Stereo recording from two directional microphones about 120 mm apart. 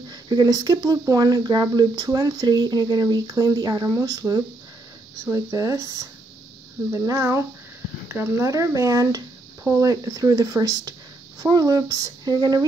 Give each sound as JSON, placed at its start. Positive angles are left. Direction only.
{"t": 0.1, "sound": "speech", "side_deg": -35}